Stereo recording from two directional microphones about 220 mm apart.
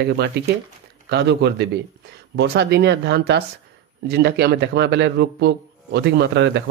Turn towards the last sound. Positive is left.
turn(degrees=-55)  # may be behind; listen again after turning